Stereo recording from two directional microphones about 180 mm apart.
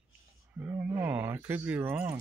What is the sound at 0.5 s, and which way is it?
Speech, 10° right (ahead or behind).